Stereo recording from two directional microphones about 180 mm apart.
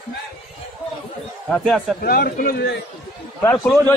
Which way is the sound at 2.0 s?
55° left (ahead or behind).